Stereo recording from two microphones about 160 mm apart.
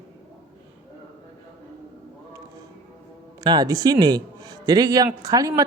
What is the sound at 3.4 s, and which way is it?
A man's voice, 25° right (ahead or behind).